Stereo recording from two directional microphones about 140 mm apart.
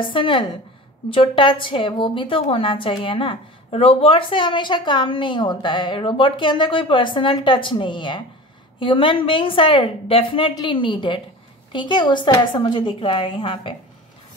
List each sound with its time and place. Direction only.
0.0 s a woman's voice: 35° left (ahead or behind)